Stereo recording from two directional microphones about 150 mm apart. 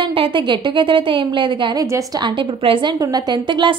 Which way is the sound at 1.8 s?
20° right (ahead or behind).